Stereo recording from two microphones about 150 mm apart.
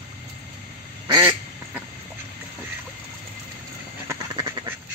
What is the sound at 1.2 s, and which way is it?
Quack, 15° right (ahead or behind).